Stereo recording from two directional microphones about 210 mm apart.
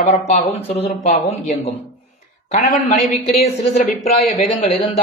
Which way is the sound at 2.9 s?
Centre (ahead or behind).